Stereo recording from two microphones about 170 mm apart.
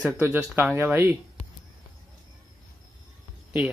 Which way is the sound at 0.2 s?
15° right (ahead or behind).